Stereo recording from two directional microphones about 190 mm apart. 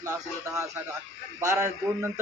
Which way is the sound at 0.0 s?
15° right (ahead or behind).